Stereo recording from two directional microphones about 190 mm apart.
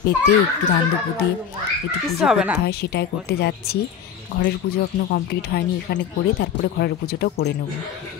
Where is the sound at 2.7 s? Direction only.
60° left (ahead or behind).